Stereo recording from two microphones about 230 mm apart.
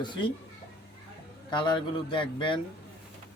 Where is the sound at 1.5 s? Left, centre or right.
Left.